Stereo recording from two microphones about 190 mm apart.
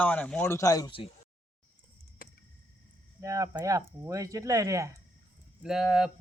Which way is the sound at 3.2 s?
15° right (ahead or behind).